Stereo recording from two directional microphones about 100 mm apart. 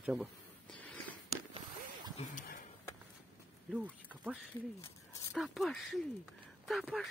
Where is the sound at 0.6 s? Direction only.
15° left (ahead or behind).